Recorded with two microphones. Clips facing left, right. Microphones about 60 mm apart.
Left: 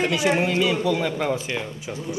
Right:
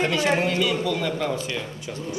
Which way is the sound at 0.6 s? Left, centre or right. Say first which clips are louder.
Left 2 dB; left.